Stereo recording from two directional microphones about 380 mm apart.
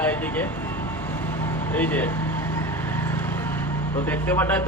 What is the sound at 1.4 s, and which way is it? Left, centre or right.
Vehicle, centre.